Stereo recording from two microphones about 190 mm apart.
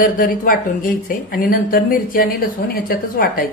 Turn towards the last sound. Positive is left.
turn(degrees=50)  # may be behind; listen again after turning